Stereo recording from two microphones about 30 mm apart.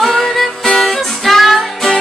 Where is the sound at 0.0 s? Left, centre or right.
Centre.